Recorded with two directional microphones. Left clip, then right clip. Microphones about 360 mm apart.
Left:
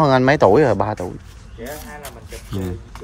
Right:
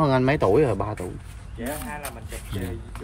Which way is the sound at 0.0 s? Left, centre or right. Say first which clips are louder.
Left 7 dB; centre.